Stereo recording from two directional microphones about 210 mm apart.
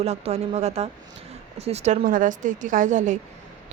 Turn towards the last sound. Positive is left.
turn(degrees=-35)  # may be behind; listen again after turning